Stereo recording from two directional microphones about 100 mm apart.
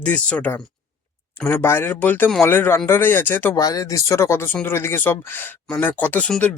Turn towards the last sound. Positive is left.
turn(degrees=15)  # may be behind; listen again after turning